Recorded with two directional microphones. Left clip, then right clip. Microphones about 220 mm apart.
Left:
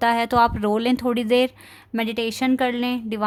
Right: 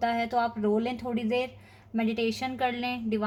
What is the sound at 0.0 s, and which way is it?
Speech, 50° left (ahead or behind).